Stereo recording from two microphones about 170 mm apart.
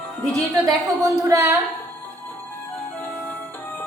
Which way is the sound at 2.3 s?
10° left (ahead or behind).